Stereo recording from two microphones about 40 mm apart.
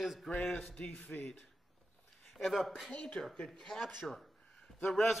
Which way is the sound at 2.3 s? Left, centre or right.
Centre.